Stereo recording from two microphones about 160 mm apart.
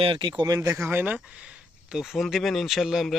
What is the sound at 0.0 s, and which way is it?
Speech, 30° right (ahead or behind).